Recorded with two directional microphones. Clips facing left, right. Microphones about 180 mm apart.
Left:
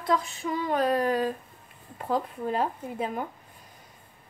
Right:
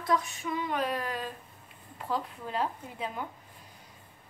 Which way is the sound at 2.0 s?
50° left (ahead or behind).